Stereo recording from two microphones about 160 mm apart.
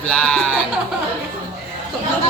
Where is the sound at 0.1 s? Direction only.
5° left (ahead or behind).